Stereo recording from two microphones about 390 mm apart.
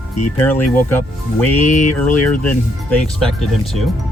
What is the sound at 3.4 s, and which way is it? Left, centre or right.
Speech, centre.